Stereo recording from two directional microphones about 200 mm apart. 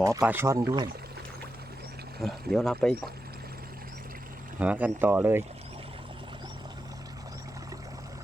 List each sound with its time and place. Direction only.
0.2 s speech: 10° right (ahead or behind)
2.2 s speech: centre (ahead or behind)
4.6 s speech: 10° right (ahead or behind)